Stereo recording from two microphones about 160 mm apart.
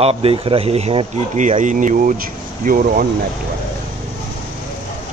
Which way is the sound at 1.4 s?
50° right (ahead or behind).